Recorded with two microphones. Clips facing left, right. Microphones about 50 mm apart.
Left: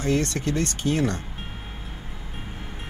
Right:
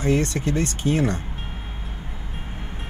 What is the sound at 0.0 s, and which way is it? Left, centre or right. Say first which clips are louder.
Speech: right 2 dB; right.